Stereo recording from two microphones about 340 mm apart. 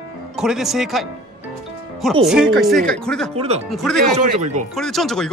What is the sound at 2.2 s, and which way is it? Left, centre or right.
Speech, centre.